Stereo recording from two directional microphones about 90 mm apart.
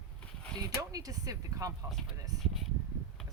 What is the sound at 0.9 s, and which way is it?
Speech, 45° right (ahead or behind).